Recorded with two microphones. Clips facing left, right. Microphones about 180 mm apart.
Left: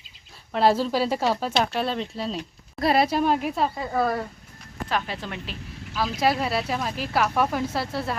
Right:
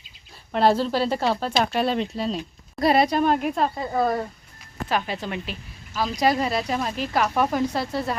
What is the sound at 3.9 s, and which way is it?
Speech, 15° right (ahead or behind).